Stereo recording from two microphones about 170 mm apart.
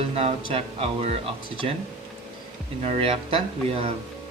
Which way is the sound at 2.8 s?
35° right (ahead or behind).